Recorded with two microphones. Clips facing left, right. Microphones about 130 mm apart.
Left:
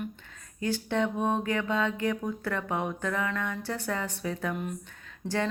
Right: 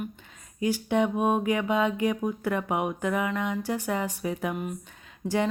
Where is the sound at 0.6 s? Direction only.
15° right (ahead or behind).